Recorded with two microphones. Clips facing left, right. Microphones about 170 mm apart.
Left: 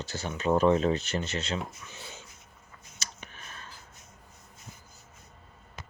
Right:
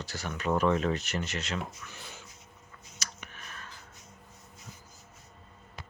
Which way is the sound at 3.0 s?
30° left (ahead or behind).